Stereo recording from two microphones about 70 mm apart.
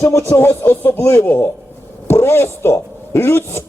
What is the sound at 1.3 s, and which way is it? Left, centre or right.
Speech, left.